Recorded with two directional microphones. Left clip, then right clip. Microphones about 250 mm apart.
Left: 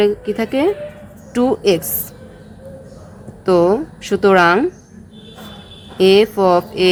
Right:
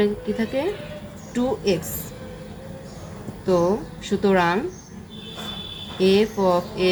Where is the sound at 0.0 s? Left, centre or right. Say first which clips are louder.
Left 7 dB; left.